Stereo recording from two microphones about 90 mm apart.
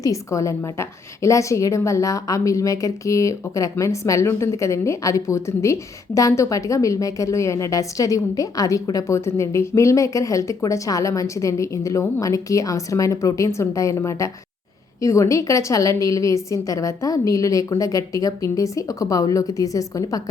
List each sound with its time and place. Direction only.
0.0 s a woman's voice: 35° left (ahead or behind)